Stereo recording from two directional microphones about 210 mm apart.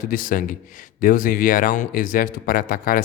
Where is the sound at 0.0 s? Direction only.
40° left (ahead or behind).